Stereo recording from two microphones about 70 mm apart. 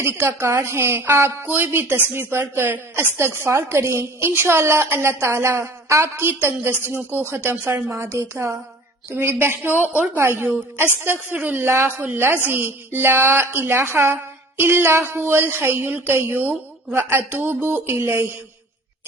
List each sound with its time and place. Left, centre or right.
0.0 s a woman's voice: right